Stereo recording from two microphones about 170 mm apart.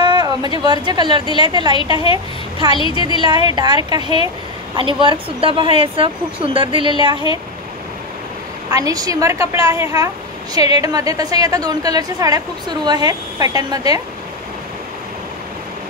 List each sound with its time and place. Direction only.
0.0 s a sound: 25° right (ahead or behind)
0.7 s a woman's voice: 25° right (ahead or behind)
2.7 s a woman's voice: 30° left (ahead or behind)
3.4 s a woman's voice: 25° right (ahead or behind)
8.6 s a woman's voice: 20° right (ahead or behind)